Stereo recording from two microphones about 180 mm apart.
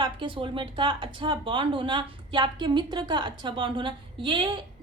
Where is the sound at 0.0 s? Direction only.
25° right (ahead or behind).